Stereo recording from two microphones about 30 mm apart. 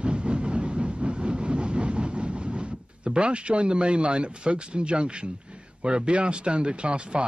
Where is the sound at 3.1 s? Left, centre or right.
Right.